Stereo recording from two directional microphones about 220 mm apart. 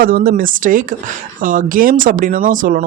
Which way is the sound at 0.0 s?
40° right (ahead or behind).